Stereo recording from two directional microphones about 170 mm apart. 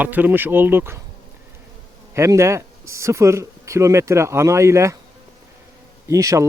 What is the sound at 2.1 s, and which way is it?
Speech, 15° right (ahead or behind).